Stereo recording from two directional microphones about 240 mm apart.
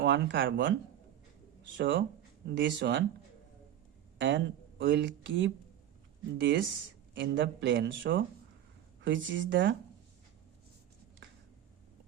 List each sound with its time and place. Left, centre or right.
0.0 s speech: right
1.8 s speech: right
4.2 s speech: right